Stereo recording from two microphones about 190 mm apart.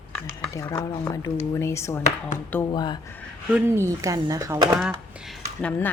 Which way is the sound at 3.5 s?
15° right (ahead or behind).